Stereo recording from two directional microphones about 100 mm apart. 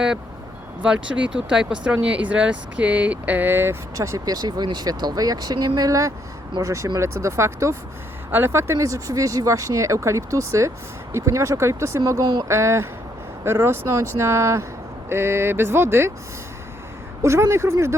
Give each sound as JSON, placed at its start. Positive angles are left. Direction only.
{"t": 0.8, "sound": "speech", "side_deg": -10}
{"t": 17.2, "sound": "speech", "side_deg": -30}